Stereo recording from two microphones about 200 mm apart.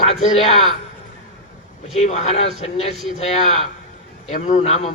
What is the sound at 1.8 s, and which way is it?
A man's voice, 35° left (ahead or behind).